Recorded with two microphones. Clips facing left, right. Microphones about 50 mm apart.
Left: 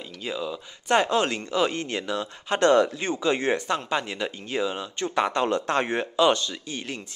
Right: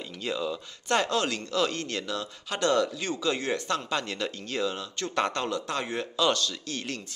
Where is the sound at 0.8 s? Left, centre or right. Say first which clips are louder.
Left 4 dB; left.